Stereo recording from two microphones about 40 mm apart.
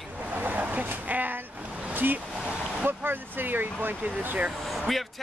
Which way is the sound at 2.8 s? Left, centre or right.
Right.